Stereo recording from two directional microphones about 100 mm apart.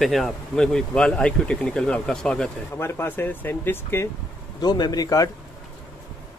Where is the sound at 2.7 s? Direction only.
25° left (ahead or behind).